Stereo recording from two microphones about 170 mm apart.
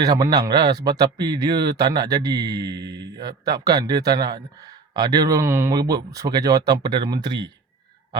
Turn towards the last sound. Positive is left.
turn(degrees=-30)  # may be behind; listen again after turning